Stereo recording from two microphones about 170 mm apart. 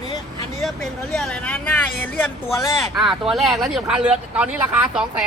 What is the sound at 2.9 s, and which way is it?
Speech, centre (ahead or behind).